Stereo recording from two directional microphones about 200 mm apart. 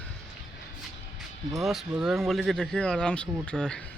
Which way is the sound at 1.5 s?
Centre (ahead or behind).